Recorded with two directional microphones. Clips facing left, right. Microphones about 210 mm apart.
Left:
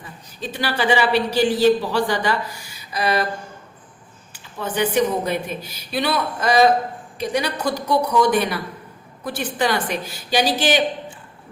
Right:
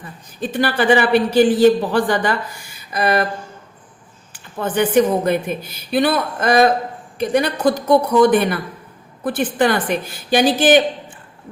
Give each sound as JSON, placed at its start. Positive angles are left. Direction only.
{"t": 0.5, "sound": "a man's voice", "side_deg": -50}
{"t": 4.3, "sound": "a man's voice", "side_deg": -50}